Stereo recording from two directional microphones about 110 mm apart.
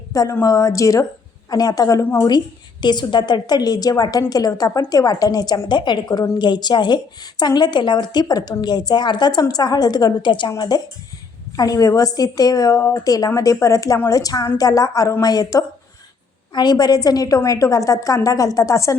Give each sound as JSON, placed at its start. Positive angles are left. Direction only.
{"t": 0.1, "sound": "a woman's voice", "side_deg": 30}